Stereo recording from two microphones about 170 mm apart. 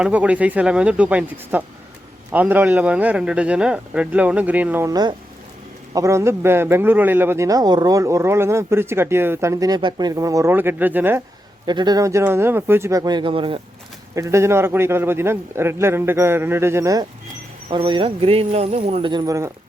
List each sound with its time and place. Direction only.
0.0 s a man's voice: 10° right (ahead or behind)
11.6 s speech: 25° right (ahead or behind)
14.2 s a man's voice: 15° right (ahead or behind)